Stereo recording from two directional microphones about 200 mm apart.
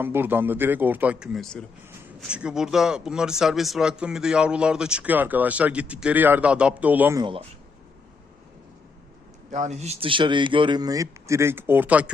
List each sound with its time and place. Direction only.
0.0 s a man's voice: 10° right (ahead or behind)
7.2 s speech: 25° right (ahead or behind)
9.5 s speech: 35° right (ahead or behind); by 12.1 s 5° right (ahead or behind)